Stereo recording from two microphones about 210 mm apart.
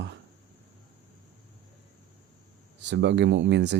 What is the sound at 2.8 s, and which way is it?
Speech, 55° right (ahead or behind).